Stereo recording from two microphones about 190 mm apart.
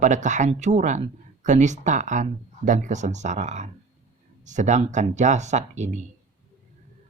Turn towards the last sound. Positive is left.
turn(degrees=-40)  # may be behind; listen again after turning